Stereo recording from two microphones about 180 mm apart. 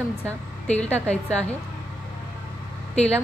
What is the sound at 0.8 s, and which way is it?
Speech, 5° left (ahead or behind).